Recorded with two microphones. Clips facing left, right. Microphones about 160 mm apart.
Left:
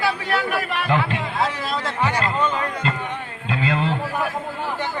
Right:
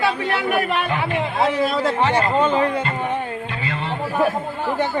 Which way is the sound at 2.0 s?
25° right (ahead or behind).